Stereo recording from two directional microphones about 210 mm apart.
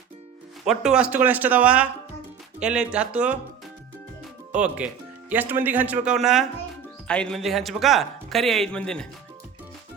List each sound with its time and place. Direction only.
0.6 s a man's voice: centre (ahead or behind)
4.5 s a man's voice: 5° right (ahead or behind)